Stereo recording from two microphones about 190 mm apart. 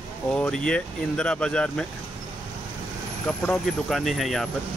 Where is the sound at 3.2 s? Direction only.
5° left (ahead or behind).